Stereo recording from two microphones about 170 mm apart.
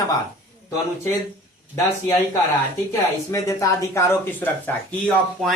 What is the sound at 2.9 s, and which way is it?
Speech, 20° left (ahead or behind).